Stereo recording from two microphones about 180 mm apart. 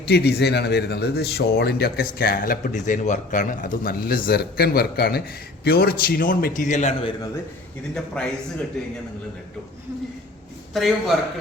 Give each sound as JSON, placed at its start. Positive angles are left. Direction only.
{"t": 0.1, "sound": "speech", "side_deg": 65}
{"t": 7.9, "sound": "a man's voice", "side_deg": 5}
{"t": 10.8, "sound": "a man's voice", "side_deg": 0}